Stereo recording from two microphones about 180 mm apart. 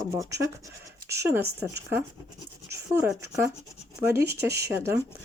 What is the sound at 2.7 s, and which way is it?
Speech, 15° right (ahead or behind).